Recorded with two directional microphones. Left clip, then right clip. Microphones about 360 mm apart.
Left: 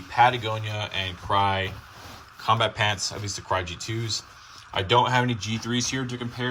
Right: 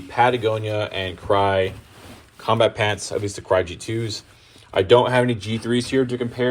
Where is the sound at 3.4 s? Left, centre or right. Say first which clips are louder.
Right 7 dB; centre.